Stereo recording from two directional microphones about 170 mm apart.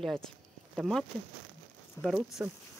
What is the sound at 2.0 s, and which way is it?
Speech, 15° left (ahead or behind).